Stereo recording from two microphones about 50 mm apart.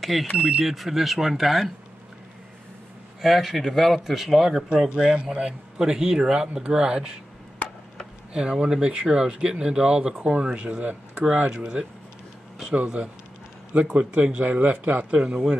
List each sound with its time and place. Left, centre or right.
0.0 s a man's voice: centre
3.2 s a man's voice: centre
4.6 s speech: centre
8.3 s speech: centre